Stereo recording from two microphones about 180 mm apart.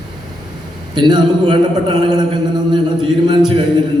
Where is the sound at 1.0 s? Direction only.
25° right (ahead or behind).